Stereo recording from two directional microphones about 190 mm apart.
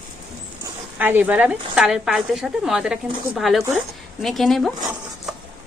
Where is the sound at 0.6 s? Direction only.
10° right (ahead or behind).